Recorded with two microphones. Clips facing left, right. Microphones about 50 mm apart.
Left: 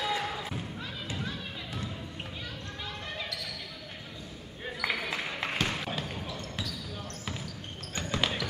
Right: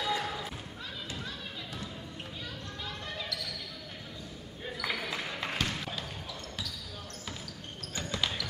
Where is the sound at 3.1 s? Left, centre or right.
Left.